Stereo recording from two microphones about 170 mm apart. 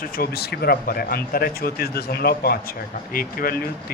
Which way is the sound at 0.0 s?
60° left (ahead or behind).